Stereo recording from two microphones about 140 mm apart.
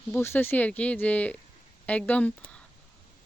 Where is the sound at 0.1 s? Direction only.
15° left (ahead or behind).